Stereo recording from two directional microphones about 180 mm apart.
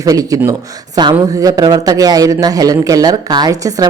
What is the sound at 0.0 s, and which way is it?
Speech, 20° right (ahead or behind).